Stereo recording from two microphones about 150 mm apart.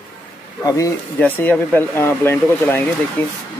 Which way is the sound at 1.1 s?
10° left (ahead or behind).